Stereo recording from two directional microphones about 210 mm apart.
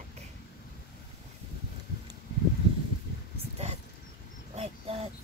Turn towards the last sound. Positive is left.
turn(degrees=-30)  # may be behind; listen again after turning